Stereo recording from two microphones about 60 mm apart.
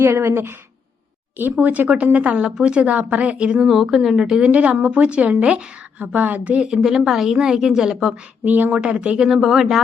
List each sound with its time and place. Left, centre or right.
0.0 s speech: right
1.5 s a woman's voice: right
3.7 s a woman's voice: centre
4.4 s a woman's voice: right
6.7 s a woman's voice: centre
8.4 s a woman's voice: right
8.8 s a woman's voice: centre